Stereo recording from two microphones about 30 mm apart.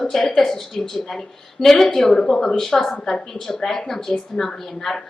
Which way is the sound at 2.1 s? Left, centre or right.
Left.